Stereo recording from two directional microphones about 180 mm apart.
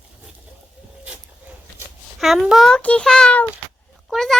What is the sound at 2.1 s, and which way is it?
A child's voice, centre (ahead or behind).